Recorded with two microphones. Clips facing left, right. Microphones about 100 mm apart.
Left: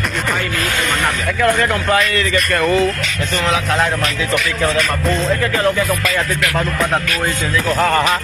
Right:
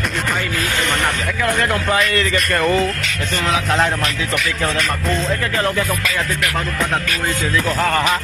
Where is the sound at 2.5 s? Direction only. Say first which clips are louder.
Left 2 dB; 15° right (ahead or behind).